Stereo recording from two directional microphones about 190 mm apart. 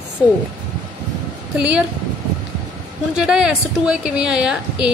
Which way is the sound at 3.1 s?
5° right (ahead or behind).